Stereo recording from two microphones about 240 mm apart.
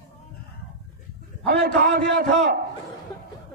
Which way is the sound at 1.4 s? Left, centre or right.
Right.